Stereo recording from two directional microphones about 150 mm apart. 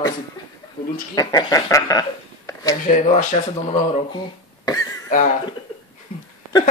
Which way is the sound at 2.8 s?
55° left (ahead or behind).